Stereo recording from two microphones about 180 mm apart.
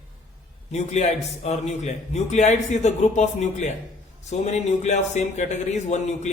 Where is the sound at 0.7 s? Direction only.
40° left (ahead or behind).